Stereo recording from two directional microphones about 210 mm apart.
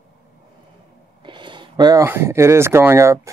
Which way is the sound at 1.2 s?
20° right (ahead or behind).